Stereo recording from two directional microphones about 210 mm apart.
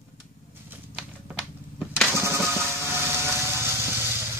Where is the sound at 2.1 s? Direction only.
10° right (ahead or behind).